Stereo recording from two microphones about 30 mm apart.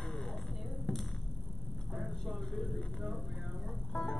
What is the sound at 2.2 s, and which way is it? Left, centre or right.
Vehicle, centre.